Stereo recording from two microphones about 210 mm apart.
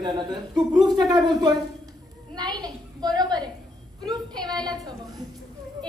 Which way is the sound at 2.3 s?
20° right (ahead or behind).